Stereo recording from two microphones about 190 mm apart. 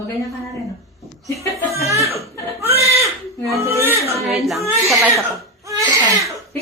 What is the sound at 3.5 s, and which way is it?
Speech, 15° right (ahead or behind).